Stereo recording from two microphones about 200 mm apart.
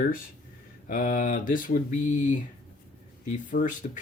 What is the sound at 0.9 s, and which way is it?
Speech, 40° left (ahead or behind).